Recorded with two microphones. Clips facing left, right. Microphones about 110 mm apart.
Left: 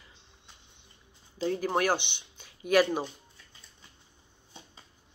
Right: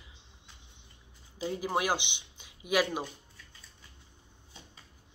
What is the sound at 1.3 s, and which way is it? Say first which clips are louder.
Speech: left 3 dB; 10° right (ahead or behind).